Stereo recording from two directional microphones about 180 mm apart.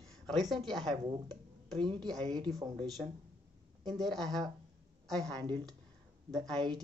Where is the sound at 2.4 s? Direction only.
25° right (ahead or behind).